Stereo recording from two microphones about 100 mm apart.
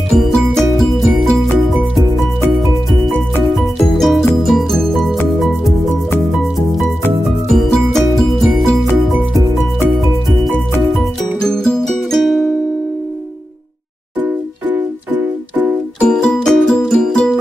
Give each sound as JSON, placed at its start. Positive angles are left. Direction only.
{"t": 0.1, "sound": "music", "side_deg": 5}
{"t": 3.4, "sound": "music", "side_deg": 0}
{"t": 7.5, "sound": "music", "side_deg": 5}
{"t": 11.4, "sound": "music", "side_deg": 5}
{"t": 14.2, "sound": "music", "side_deg": -20}
{"t": 16.0, "sound": "music", "side_deg": 10}